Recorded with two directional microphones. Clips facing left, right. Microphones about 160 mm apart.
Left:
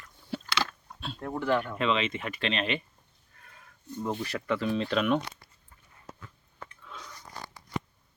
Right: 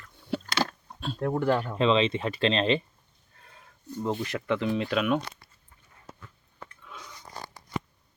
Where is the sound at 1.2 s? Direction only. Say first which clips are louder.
Right 3 dB; 50° right (ahead or behind).